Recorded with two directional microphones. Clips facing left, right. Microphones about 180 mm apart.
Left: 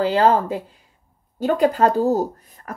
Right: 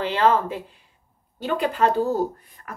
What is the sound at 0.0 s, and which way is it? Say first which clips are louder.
Speech: left 3 dB; 35° left (ahead or behind).